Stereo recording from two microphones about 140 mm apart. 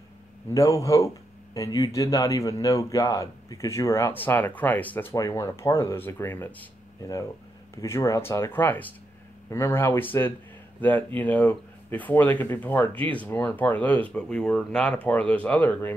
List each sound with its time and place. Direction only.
0.5 s speech: 25° left (ahead or behind)
5.1 s speech: 25° left (ahead or behind)